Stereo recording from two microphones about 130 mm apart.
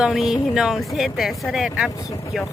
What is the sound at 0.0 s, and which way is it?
Speech, 5° right (ahead or behind).